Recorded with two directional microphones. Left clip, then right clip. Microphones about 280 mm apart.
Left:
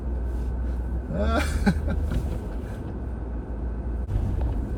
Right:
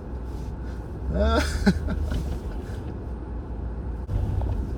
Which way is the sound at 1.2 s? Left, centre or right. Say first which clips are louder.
Right 2 dB; right.